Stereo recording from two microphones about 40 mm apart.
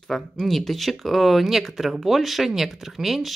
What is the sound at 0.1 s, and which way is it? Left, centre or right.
Speech, centre.